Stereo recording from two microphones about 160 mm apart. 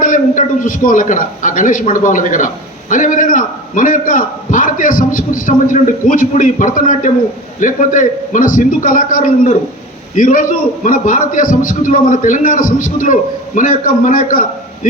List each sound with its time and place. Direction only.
0.0 s a man's voice: 55° left (ahead or behind)